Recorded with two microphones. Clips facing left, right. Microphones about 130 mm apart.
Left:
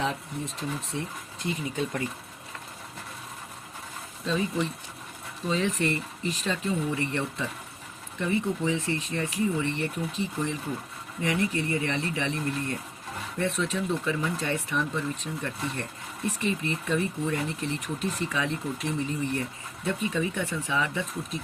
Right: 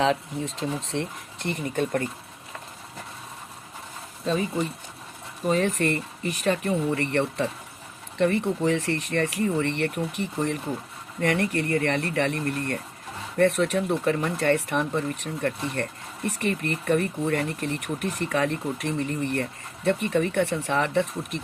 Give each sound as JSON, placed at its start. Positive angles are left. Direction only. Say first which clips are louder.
{"t": 0.0, "sound": "speech", "louder": "right 7 dB", "side_deg": -90}
{"t": 4.3, "sound": "speech", "louder": "right 2 dB", "side_deg": -40}
{"t": 5.5, "sound": "speech", "louder": "right 4 dB", "side_deg": -55}